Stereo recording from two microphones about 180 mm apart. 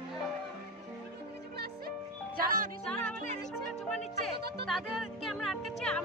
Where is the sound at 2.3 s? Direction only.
50° right (ahead or behind).